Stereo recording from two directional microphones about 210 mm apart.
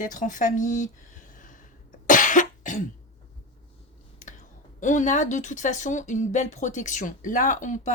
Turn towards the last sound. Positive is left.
turn(degrees=35)  # may be behind; listen again after turning